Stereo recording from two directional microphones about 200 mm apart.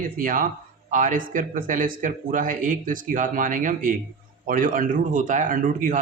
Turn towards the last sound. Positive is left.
turn(degrees=-40)  # may be behind; listen again after turning